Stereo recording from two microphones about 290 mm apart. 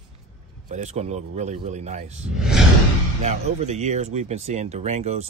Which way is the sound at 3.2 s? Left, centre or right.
Right.